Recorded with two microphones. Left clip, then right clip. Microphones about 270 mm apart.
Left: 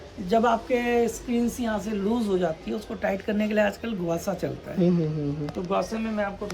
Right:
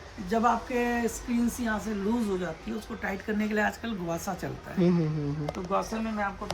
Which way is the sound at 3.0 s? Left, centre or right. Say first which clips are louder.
Left 5 dB; centre.